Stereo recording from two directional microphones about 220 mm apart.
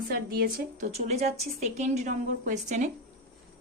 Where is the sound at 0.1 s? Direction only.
45° right (ahead or behind).